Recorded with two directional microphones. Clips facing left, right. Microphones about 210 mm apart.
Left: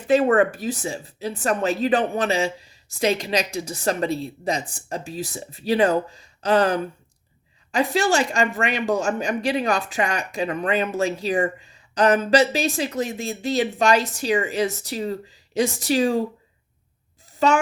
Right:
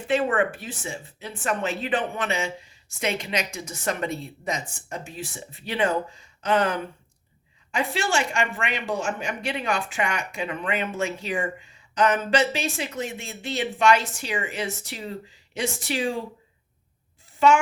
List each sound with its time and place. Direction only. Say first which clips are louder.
0.1 s speech: left 6 dB; 40° left (ahead or behind)
17.4 s speech: right 1 dB; 40° left (ahead or behind)